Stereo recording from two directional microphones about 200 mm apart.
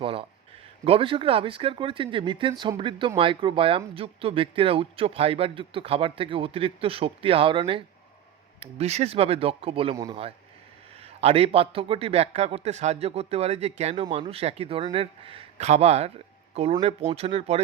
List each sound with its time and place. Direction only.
0.0 s a man's voice: 25° right (ahead or behind)